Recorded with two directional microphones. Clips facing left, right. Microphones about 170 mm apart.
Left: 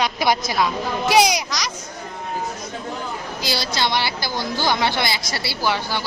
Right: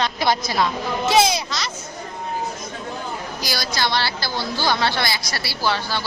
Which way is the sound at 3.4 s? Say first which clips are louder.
Left 1 dB; 25° left (ahead or behind).